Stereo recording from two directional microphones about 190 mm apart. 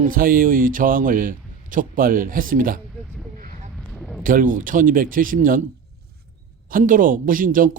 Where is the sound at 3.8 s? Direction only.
5° left (ahead or behind).